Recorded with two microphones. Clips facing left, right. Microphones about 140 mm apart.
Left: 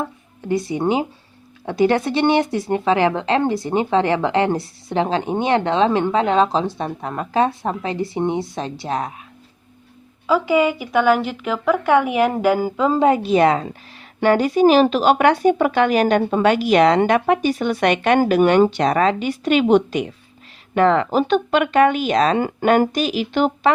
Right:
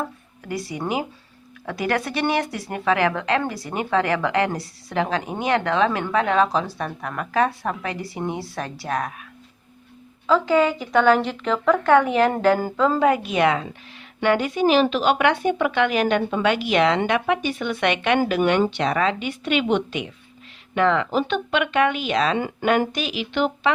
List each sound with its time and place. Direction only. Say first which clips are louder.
0.0 s speech: left 3 dB; 25° left (ahead or behind)
10.2 s a woman's voice: left 1 dB; 10° left (ahead or behind)
13.1 s speech: left 4 dB; 30° left (ahead or behind)